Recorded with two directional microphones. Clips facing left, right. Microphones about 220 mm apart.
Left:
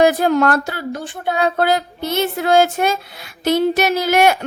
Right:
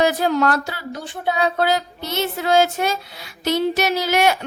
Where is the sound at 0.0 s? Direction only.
55° left (ahead or behind).